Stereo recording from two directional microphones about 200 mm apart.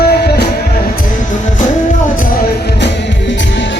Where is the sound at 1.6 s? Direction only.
40° left (ahead or behind); by 3.8 s 60° left (ahead or behind).